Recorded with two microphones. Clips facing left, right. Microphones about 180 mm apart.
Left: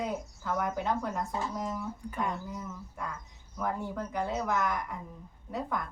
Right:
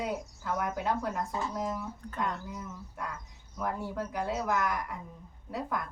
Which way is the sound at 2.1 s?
10° left (ahead or behind).